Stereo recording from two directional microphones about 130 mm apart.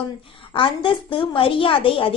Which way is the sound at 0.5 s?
40° left (ahead or behind).